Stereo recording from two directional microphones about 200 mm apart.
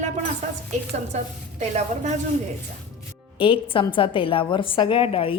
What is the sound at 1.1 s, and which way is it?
A woman's voice, 35° right (ahead or behind).